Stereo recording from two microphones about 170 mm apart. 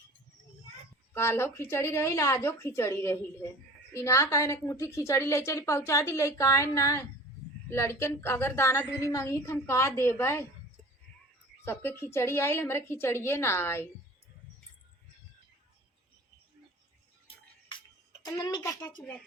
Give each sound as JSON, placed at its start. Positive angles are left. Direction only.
{"t": 1.1, "sound": "a woman's voice", "side_deg": 15}
{"t": 11.6, "sound": "a woman's voice", "side_deg": 15}
{"t": 17.2, "sound": "music", "side_deg": 30}
{"t": 18.3, "sound": "speech", "side_deg": 20}